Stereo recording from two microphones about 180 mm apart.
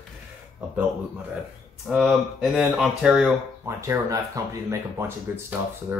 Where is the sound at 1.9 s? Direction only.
Centre (ahead or behind).